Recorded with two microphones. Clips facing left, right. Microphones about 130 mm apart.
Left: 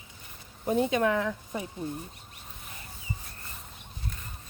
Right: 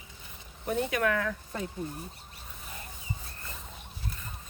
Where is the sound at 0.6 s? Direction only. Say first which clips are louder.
Left 3 dB; 25° left (ahead or behind).